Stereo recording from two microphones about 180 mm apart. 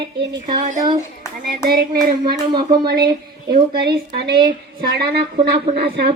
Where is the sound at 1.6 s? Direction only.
55° right (ahead or behind).